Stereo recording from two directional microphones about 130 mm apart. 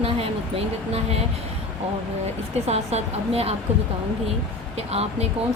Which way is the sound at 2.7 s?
55° right (ahead or behind).